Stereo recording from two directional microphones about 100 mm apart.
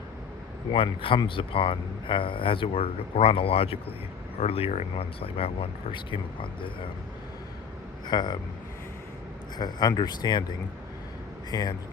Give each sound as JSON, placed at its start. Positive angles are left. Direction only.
{"t": 0.7, "sound": "speech", "side_deg": 60}
{"t": 8.0, "sound": "speech", "side_deg": 45}
{"t": 9.6, "sound": "speech", "side_deg": 45}
{"t": 11.5, "sound": "speech", "side_deg": 40}